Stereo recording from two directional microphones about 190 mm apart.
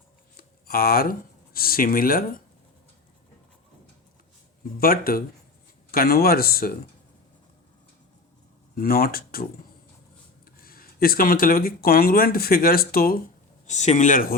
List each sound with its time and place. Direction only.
0.3 s a sound: 50° left (ahead or behind)
1.5 s speech: 50° left (ahead or behind)
4.8 s speech: 50° left (ahead or behind)
8.7 s speech: 50° left (ahead or behind)
10.6 s speech: 50° left (ahead or behind)
13.7 s speech: 35° left (ahead or behind)